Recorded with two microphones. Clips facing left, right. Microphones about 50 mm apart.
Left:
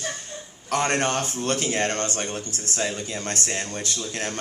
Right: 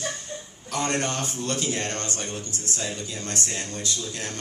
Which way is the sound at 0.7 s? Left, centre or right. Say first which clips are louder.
Left 4 dB; left.